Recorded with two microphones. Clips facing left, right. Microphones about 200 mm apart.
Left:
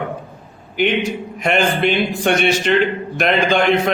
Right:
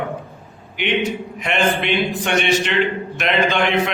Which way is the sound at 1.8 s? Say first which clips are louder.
Left 3 dB; 40° left (ahead or behind).